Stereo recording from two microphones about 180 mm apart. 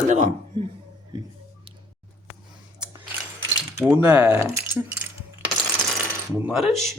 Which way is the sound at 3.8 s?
5° right (ahead or behind).